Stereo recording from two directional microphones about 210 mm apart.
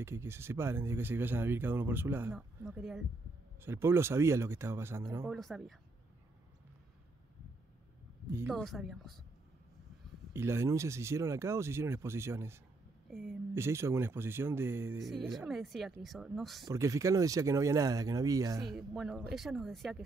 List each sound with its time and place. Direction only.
0.0 s speech: 10° right (ahead or behind)
5.3 s speech: centre (ahead or behind)
8.3 s speech: 10° right (ahead or behind)
8.5 s speech: centre (ahead or behind)
10.3 s speech: 10° right (ahead or behind)
13.1 s speech: centre (ahead or behind)
13.6 s speech: 10° right (ahead or behind)
15.0 s speech: centre (ahead or behind)
16.6 s speech: 15° right (ahead or behind)
18.6 s speech: centre (ahead or behind)